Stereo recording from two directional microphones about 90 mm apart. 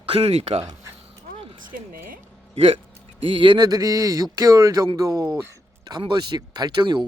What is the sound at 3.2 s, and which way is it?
Speech, 70° right (ahead or behind).